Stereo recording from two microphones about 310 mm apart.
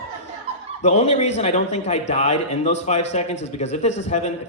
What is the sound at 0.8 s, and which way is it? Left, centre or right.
A man's voice, left.